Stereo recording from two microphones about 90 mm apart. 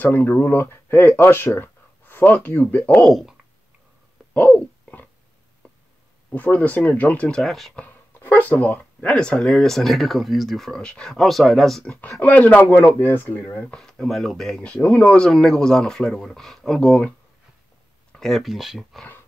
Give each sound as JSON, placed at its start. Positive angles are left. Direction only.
{"t": 0.0, "sound": "speech", "side_deg": 20}
{"t": 3.0, "sound": "speech", "side_deg": 0}
{"t": 4.3, "sound": "a sound", "side_deg": 20}
{"t": 6.3, "sound": "speech", "side_deg": 20}
{"t": 7.7, "sound": "speech", "side_deg": 20}
{"t": 12.2, "sound": "speech", "side_deg": 15}
{"t": 18.1, "sound": "speech", "side_deg": 0}